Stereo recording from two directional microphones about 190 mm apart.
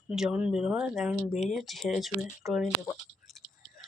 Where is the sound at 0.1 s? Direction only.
5° right (ahead or behind).